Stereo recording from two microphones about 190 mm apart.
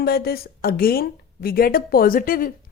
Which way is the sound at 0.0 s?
55° left (ahead or behind).